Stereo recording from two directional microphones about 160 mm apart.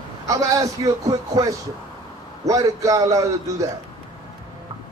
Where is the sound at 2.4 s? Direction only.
20° right (ahead or behind).